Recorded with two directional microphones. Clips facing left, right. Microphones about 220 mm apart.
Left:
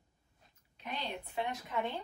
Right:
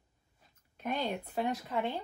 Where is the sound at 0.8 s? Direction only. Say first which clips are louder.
Right 7 dB; 50° right (ahead or behind).